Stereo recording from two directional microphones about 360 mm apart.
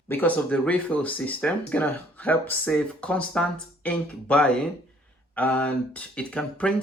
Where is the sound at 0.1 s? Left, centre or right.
Centre.